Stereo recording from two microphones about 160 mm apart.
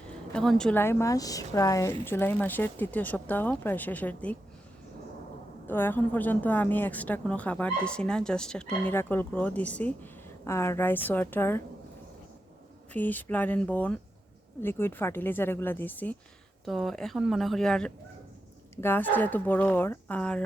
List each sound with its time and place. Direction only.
0.1 s a woman's voice: 5° left (ahead or behind)
5.6 s a woman's voice: 15° left (ahead or behind)
12.9 s a woman's voice: 10° left (ahead or behind)